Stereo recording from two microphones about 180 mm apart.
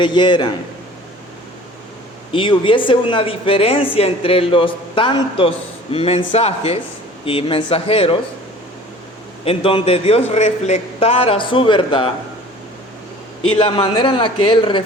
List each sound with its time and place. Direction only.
0.0 s speech: 25° left (ahead or behind)
2.3 s a man's voice: 30° left (ahead or behind)
9.4 s a man's voice: 30° left (ahead or behind)
13.6 s speech: 25° left (ahead or behind)